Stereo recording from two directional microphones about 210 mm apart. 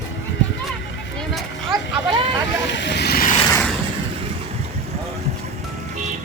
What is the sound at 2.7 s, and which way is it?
Vehicle, 55° left (ahead or behind).